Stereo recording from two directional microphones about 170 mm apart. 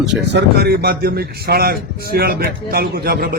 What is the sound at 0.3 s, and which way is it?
Speech, 75° right (ahead or behind).